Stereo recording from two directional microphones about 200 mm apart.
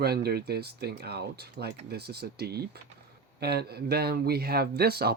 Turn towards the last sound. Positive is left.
turn(degrees=-50)  # may be behind; listen again after turning